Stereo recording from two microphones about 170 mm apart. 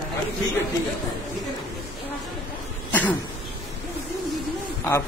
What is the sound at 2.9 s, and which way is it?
Cough, 10° left (ahead or behind).